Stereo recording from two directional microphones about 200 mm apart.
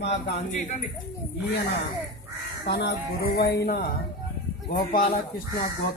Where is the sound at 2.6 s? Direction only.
55° left (ahead or behind).